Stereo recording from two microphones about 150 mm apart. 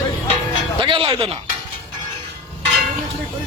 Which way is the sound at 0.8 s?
35° right (ahead or behind).